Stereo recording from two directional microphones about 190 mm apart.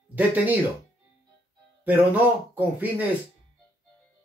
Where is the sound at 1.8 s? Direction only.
10° right (ahead or behind).